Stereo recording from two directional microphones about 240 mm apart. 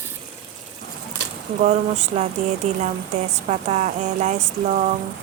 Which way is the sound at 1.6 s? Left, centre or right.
Right.